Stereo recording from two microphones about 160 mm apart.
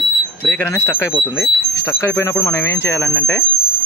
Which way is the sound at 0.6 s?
15° left (ahead or behind).